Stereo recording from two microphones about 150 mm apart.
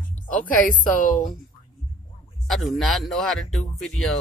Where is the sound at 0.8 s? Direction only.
65° left (ahead or behind).